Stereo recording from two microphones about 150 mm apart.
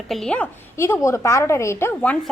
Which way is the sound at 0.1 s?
5° left (ahead or behind).